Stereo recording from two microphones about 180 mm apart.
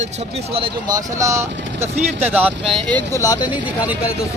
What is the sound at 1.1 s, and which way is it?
Speech, 15° right (ahead or behind).